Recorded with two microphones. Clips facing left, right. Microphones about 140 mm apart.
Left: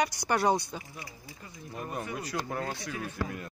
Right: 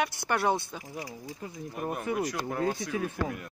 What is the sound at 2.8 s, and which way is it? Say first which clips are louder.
Speech: right 4 dB; 5° right (ahead or behind).